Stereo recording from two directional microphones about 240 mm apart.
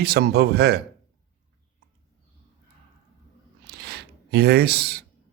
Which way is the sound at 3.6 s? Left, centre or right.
Right.